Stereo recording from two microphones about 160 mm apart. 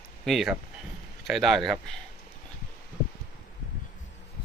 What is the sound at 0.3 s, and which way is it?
Speech, centre (ahead or behind).